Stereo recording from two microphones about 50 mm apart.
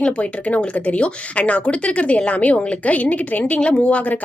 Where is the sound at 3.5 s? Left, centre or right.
Left.